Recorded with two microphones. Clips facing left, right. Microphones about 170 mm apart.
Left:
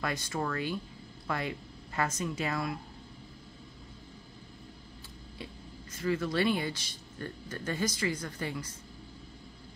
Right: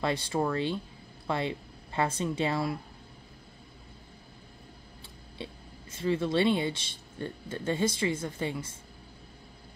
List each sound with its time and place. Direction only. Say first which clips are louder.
0.0 s speech: right 5 dB; 30° right (ahead or behind)
5.4 s speech: right 3 dB; 25° right (ahead or behind)